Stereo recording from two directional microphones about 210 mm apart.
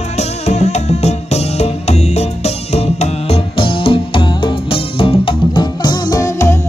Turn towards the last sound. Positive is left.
turn(degrees=15)  # may be behind; listen again after turning